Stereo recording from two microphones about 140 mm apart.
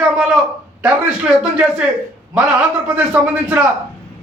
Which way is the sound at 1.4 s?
5° right (ahead or behind).